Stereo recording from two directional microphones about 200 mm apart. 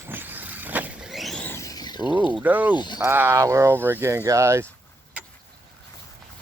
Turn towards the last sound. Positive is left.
turn(degrees=-15)  # may be behind; listen again after turning